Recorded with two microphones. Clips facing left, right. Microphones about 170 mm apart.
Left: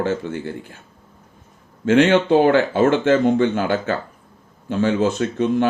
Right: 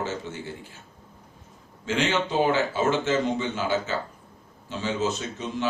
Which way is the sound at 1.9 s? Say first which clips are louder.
Left 11 dB; 55° left (ahead or behind).